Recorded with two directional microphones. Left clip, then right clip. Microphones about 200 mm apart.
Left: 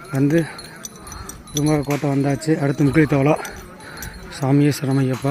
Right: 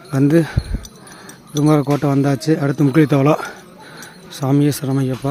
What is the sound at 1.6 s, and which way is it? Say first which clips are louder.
Speech: right 5 dB; 35° right (ahead or behind).